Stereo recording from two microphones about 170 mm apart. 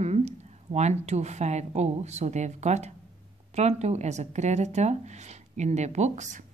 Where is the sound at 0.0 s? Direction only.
40° right (ahead or behind).